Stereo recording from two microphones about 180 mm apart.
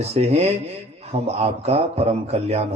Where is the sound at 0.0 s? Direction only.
35° right (ahead or behind).